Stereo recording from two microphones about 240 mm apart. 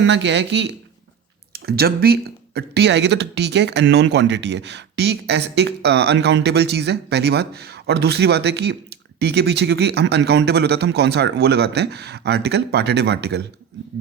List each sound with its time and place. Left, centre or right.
0.0 s speech: right